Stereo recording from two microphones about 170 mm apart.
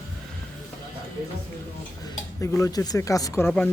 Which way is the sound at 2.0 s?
20° left (ahead or behind).